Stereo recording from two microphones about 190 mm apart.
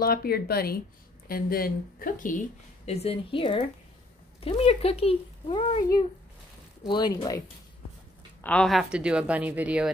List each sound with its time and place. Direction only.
0.0 s speech: 55° left (ahead or behind); by 5.8 s 30° left (ahead or behind)
6.8 s speech: 20° left (ahead or behind)
8.4 s a woman's voice: 5° left (ahead or behind)